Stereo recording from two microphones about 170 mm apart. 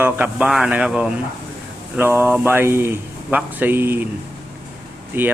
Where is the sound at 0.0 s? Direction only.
10° right (ahead or behind).